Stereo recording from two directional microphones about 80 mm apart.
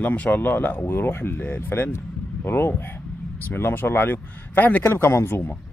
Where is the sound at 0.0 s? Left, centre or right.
Centre.